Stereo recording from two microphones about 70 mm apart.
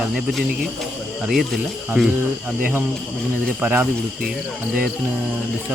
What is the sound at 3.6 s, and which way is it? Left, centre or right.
Speech, right.